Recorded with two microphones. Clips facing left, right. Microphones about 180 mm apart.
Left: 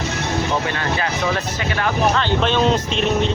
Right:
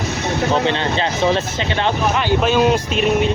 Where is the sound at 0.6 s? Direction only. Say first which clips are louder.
Right 4 dB; 25° right (ahead or behind).